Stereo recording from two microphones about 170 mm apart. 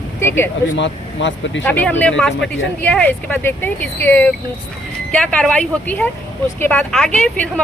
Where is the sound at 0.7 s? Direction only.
90° left.